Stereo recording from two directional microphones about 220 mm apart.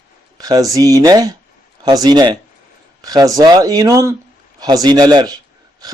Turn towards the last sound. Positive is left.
turn(degrees=-15)  # may be behind; listen again after turning